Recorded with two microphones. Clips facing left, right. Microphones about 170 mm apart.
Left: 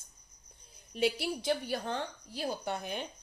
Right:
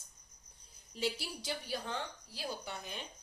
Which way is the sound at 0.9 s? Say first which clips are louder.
Left 7 dB; 60° left (ahead or behind).